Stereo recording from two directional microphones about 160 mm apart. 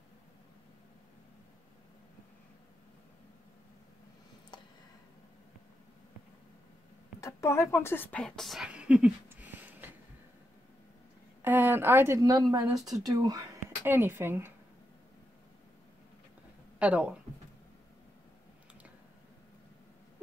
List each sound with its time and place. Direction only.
7.2 s a sound: 20° left (ahead or behind)
7.7 s speech: 15° left (ahead or behind); by 9.8 s 10° right (ahead or behind)
11.4 s a woman's voice: 10° right (ahead or behind)
16.7 s speech: 10° right (ahead or behind)